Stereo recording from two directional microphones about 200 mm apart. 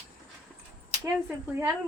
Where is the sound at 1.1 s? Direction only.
10° right (ahead or behind).